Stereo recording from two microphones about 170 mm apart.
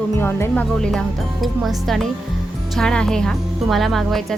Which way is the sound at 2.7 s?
5° left (ahead or behind).